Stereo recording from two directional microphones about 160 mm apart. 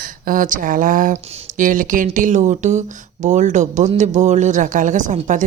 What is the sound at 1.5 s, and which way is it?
Speech, 55° right (ahead or behind).